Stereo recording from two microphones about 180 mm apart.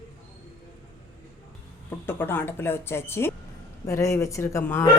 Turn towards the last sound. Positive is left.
turn(degrees=15)  # may be behind; listen again after turning